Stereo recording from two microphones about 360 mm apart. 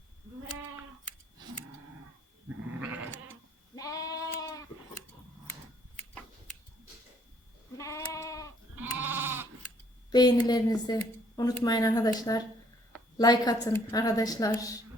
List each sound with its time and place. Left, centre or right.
3.8 s sheep: centre
7.8 s goat: centre
9.0 s goat: centre
10.1 s a woman's voice: centre